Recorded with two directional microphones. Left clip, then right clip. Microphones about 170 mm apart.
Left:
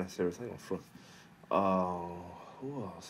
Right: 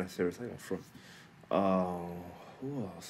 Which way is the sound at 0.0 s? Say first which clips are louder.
Even; 15° right (ahead or behind).